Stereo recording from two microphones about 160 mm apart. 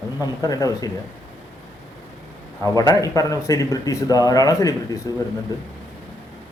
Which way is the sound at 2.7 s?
20° left (ahead or behind).